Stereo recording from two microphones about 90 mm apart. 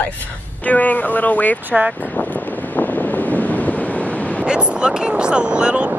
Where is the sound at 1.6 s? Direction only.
20° right (ahead or behind).